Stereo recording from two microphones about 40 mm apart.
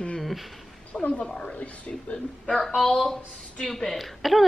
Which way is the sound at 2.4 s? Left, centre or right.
Centre.